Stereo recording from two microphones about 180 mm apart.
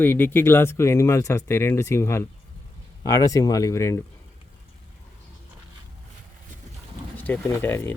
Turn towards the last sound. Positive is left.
turn(degrees=15)  # may be behind; listen again after turning